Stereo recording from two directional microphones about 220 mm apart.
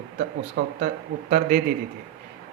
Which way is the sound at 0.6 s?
45° right (ahead or behind).